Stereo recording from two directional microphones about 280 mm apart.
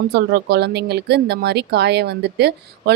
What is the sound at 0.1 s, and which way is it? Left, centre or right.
Speech, right.